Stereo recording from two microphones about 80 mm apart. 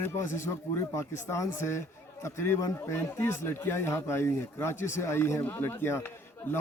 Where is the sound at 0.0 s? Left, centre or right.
Left.